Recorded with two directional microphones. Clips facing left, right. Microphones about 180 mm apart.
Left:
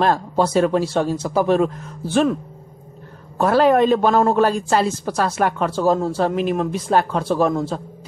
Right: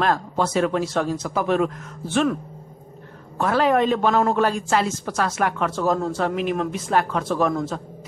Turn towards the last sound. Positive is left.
turn(degrees=30)  # may be behind; listen again after turning